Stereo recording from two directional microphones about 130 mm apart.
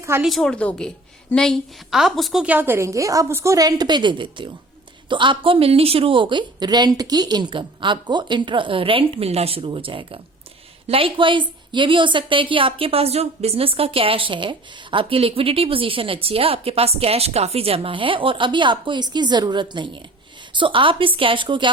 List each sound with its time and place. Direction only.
0.2 s a woman's voice: centre (ahead or behind); by 21.7 s 40° right (ahead or behind)